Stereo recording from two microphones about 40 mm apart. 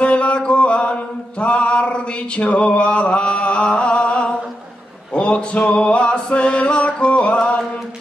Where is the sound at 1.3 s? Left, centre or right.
Left.